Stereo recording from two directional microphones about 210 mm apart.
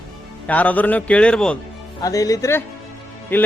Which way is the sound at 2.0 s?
15° left (ahead or behind).